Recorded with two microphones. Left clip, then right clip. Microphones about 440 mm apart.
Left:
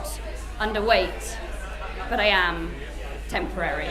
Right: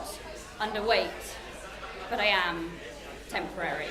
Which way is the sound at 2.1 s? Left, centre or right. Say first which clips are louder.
Left 5 dB; left.